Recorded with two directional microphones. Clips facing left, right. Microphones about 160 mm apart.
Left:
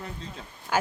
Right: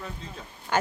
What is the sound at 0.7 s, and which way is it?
Speech, 5° left (ahead or behind).